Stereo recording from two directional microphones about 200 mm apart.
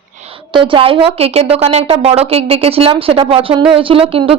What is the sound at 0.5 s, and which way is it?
Speech, 25° right (ahead or behind).